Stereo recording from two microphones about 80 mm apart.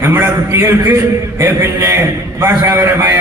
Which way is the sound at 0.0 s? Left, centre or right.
Right.